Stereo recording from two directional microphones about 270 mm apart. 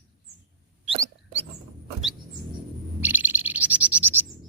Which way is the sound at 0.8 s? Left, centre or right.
Right.